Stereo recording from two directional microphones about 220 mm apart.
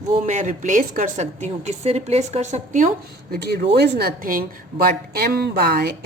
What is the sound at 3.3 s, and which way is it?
Speech, 50° right (ahead or behind).